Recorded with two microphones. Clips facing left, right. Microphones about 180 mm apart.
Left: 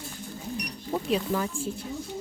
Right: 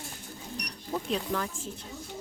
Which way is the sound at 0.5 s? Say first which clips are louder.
Left 3 dB; 5° left (ahead or behind).